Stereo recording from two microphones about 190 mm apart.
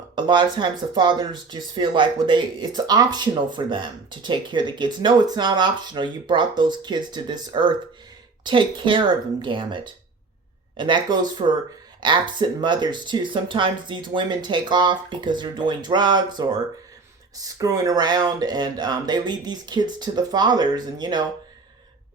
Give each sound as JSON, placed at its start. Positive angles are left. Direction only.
{"t": 0.2, "sound": "speech", "side_deg": -25}